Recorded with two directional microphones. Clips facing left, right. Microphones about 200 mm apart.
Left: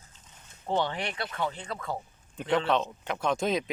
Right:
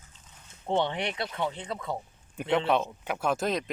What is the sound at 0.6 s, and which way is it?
Speech, 20° right (ahead or behind).